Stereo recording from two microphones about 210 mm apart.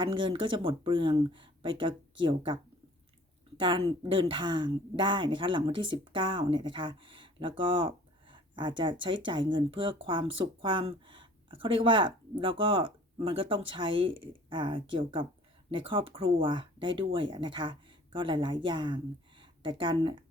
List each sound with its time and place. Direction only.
0.0 s a woman's voice: 25° right (ahead or behind)
3.6 s a woman's voice: 25° right (ahead or behind)